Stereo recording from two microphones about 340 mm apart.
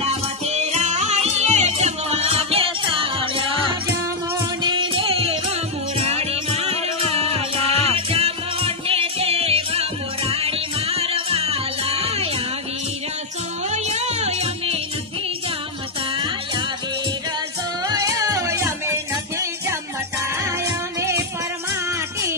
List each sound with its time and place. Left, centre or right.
0.0 s music: centre
4.6 s music: centre
13.7 s music: centre
17.8 s music: centre